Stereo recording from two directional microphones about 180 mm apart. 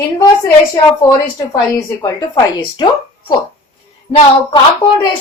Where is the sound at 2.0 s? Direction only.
20° left (ahead or behind).